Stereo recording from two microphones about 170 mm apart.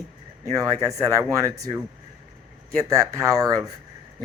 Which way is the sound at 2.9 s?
20° right (ahead or behind).